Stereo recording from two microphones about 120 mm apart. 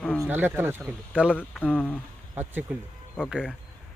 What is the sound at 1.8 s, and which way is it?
Speech, 10° left (ahead or behind).